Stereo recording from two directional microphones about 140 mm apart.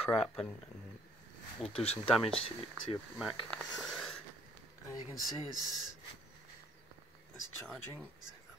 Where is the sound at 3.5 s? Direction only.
Centre (ahead or behind).